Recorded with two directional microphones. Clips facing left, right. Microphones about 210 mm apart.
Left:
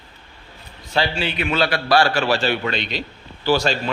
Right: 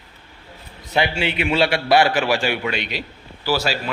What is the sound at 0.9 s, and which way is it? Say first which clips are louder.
A man's voice: right 1 dB; 20° right (ahead or behind).